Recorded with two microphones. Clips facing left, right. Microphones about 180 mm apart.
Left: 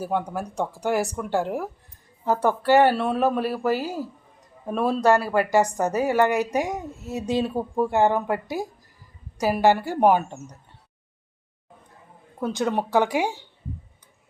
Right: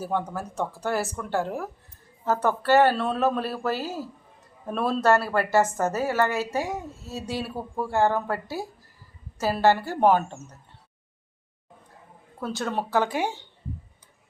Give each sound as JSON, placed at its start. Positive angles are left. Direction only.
{"t": 0.0, "sound": "a woman's voice", "side_deg": 10}
{"t": 12.4, "sound": "a woman's voice", "side_deg": 15}